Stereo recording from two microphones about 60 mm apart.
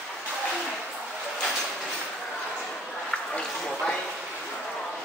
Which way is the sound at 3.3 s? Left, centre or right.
Centre.